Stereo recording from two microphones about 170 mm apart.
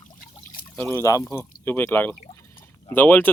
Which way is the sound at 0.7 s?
15° left (ahead or behind).